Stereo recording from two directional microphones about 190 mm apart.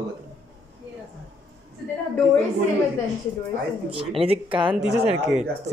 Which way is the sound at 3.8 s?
30° right (ahead or behind).